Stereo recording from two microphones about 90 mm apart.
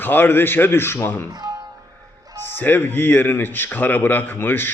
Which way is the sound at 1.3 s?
50° right (ahead or behind).